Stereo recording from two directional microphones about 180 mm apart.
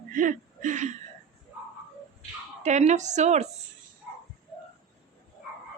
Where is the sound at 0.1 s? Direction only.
45° right (ahead or behind).